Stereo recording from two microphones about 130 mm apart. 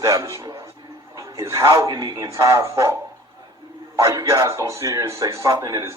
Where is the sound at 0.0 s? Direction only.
25° right (ahead or behind).